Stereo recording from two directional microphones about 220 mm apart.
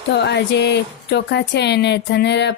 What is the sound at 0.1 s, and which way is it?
Speech, 50° left (ahead or behind).